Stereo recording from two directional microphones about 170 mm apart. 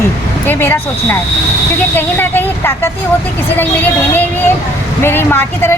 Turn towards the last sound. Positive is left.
turn(degrees=10)  # may be behind; listen again after turning